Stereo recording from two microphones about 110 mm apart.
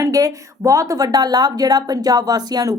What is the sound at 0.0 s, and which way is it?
Speech, 30° right (ahead or behind).